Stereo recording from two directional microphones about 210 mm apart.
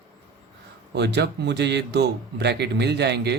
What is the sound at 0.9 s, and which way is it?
Speech, 55° right (ahead or behind).